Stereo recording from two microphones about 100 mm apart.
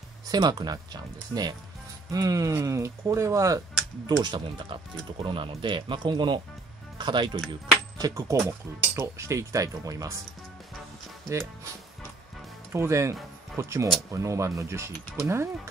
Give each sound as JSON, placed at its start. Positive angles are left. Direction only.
{"t": 0.3, "sound": "speech", "side_deg": -45}
{"t": 4.2, "sound": "speech", "side_deg": -55}
{"t": 7.4, "sound": "speech", "side_deg": -5}
{"t": 8.0, "sound": "speech", "side_deg": -30}
{"t": 12.7, "sound": "speech", "side_deg": -30}